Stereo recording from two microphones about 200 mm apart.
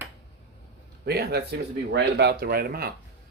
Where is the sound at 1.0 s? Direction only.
55° right (ahead or behind).